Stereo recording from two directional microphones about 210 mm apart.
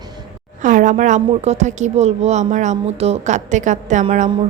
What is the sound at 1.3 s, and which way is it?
A woman's voice, 30° right (ahead or behind).